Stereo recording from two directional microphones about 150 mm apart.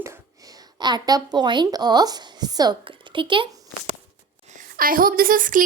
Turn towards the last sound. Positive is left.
turn(degrees=-65)  # may be behind; listen again after turning